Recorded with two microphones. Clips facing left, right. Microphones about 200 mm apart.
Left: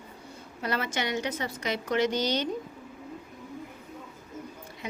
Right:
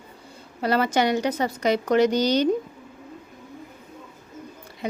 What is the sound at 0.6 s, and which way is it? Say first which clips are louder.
A woman's voice: right 9 dB; 35° right (ahead or behind).